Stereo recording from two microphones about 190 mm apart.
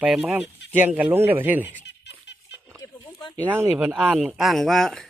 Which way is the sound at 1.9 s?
65° left (ahead or behind).